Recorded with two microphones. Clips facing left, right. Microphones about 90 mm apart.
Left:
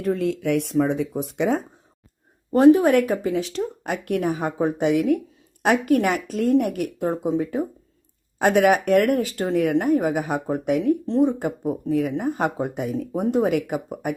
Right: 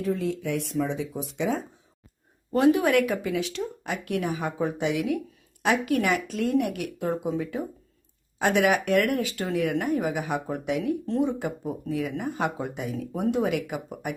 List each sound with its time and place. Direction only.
0.0 s speech: 60° left (ahead or behind)
2.5 s a woman's voice: 35° left (ahead or behind)